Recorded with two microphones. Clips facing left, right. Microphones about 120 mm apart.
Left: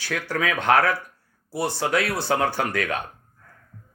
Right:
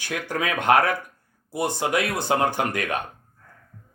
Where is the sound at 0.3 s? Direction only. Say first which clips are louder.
Right 1 dB; 15° right (ahead or behind).